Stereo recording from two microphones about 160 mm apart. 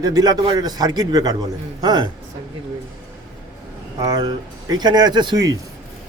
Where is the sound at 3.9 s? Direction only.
25° right (ahead or behind).